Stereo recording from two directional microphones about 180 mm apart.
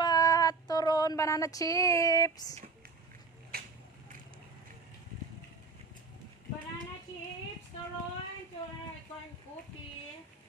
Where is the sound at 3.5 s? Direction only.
55° right (ahead or behind).